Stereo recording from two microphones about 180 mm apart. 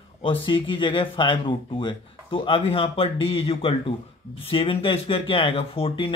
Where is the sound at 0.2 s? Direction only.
30° left (ahead or behind).